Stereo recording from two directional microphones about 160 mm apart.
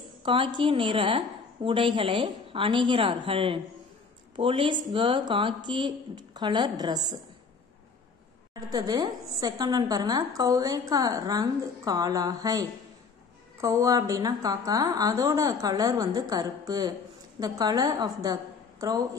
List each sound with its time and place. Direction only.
0.2 s a woman's voice: 30° right (ahead or behind)
8.7 s a woman's voice: 25° right (ahead or behind)